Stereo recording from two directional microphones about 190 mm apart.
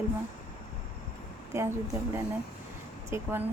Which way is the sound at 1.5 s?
15° right (ahead or behind).